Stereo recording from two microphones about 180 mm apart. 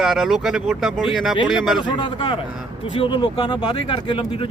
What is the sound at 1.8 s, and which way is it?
Speech, 25° left (ahead or behind).